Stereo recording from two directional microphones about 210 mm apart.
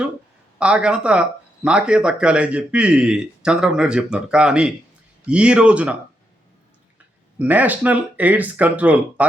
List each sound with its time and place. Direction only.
0.6 s speech: 5° right (ahead or behind)
7.3 s speech: 10° right (ahead or behind)